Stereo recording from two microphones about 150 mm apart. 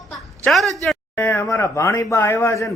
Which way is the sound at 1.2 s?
15° left (ahead or behind).